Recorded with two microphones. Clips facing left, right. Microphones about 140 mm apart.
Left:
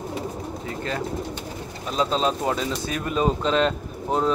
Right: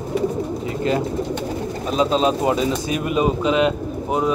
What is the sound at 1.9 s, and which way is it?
Speech, 10° right (ahead or behind).